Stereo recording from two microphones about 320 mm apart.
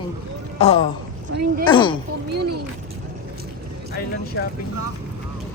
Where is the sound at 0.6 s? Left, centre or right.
Centre.